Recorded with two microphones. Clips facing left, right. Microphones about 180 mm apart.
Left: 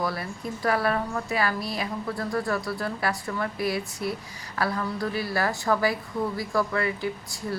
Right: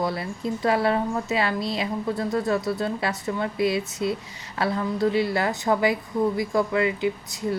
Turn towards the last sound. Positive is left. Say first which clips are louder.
# right 4 dB
turn(degrees=-20)  # may be behind; listen again after turning